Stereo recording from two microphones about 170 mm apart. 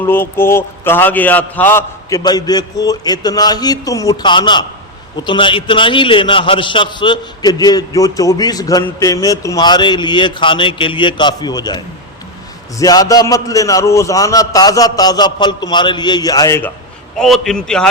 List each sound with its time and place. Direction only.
0.0 s a man's voice: 15° left (ahead or behind)
12.8 s a man's voice: 20° left (ahead or behind)
17.2 s a man's voice: centre (ahead or behind)